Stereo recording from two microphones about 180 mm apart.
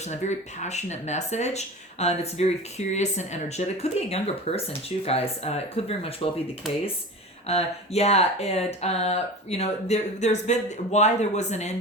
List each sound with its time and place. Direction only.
0.1 s speech: 40° left (ahead or behind)
7.4 s speech: 35° left (ahead or behind)